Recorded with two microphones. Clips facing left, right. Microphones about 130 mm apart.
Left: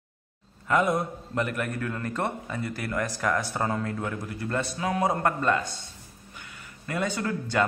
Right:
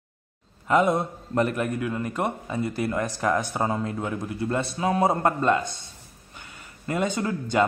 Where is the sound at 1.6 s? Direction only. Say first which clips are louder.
Right 4 dB; 15° right (ahead or behind).